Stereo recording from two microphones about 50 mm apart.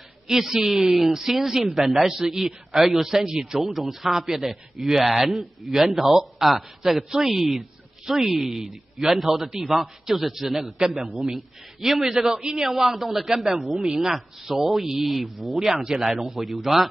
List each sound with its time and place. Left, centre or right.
0.3 s a man's voice: centre